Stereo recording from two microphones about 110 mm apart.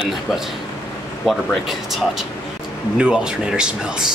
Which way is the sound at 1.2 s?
Centre (ahead or behind).